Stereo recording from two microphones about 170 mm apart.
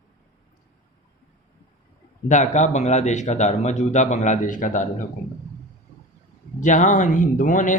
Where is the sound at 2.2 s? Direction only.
45° left (ahead or behind).